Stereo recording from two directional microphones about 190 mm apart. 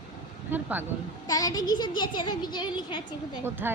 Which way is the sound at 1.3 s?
20° left (ahead or behind).